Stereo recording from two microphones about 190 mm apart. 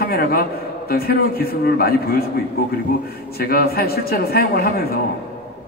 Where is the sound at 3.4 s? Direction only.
50° left (ahead or behind).